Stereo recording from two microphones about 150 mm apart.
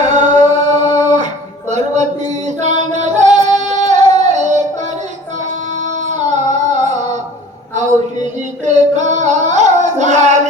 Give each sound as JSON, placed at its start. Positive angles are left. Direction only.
{"t": 0.0, "sound": "music", "side_deg": -50}
{"t": 6.3, "sound": "music", "side_deg": -50}
{"t": 8.6, "sound": "music", "side_deg": -50}